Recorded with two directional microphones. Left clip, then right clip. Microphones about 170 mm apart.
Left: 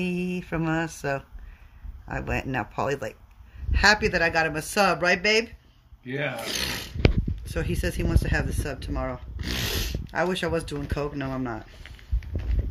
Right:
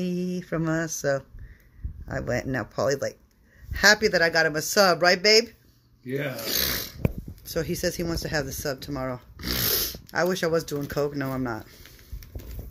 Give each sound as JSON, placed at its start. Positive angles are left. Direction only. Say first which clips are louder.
{"t": 0.0, "sound": "speech", "louder": "left 1 dB", "side_deg": 20}